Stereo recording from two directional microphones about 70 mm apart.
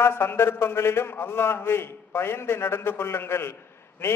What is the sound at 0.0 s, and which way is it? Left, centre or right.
A man's voice, left.